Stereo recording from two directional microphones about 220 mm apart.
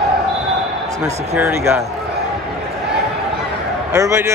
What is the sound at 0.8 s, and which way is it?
Basketball bounce, 15° right (ahead or behind).